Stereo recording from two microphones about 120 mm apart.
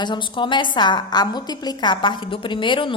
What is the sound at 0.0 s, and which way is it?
A woman's voice, 40° left (ahead or behind).